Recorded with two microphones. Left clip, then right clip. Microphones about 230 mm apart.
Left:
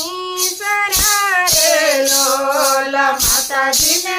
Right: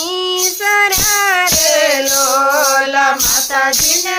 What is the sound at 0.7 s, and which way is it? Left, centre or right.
Music, right.